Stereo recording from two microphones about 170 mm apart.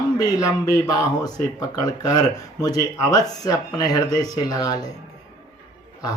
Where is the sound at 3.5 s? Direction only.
20° left (ahead or behind).